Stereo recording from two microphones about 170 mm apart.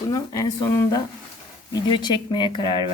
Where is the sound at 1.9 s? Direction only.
25° left (ahead or behind).